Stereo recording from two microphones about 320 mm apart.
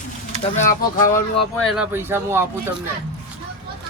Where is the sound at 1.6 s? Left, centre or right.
Centre.